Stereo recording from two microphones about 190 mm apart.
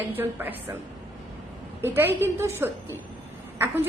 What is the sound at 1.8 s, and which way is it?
A woman's voice, 10° right (ahead or behind).